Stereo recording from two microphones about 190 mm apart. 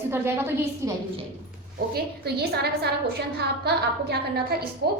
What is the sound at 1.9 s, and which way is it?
A woman's voice, 60° right (ahead or behind).